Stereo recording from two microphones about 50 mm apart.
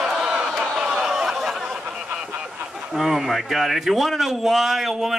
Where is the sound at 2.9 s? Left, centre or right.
Centre.